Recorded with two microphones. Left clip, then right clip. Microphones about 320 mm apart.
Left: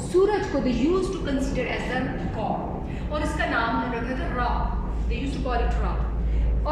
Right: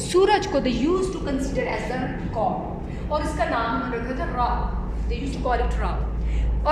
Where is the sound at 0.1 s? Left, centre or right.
Right.